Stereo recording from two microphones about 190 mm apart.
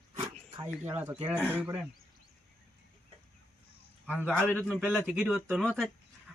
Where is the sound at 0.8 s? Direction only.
10° right (ahead or behind).